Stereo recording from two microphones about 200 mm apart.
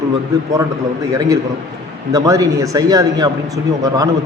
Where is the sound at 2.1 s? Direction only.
15° right (ahead or behind).